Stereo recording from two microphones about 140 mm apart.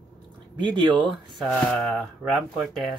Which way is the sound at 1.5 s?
Centre (ahead or behind).